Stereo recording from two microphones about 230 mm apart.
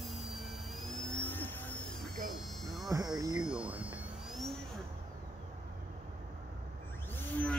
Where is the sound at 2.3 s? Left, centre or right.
Centre.